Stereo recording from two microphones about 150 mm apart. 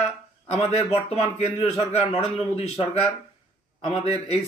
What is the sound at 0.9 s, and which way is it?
Speech, 45° left (ahead or behind).